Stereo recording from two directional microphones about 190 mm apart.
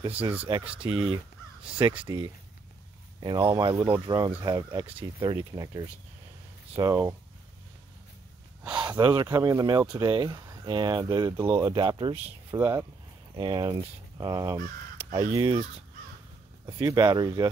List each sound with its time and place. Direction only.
0.7 s speech: 5° right (ahead or behind)
1.8 s speech: 25° right (ahead or behind)
3.7 s speech: 10° right (ahead or behind)
4.0 s speech: 20° right (ahead or behind)
8.7 s speech: 25° right (ahead or behind)
16.6 s speech: 15° right (ahead or behind)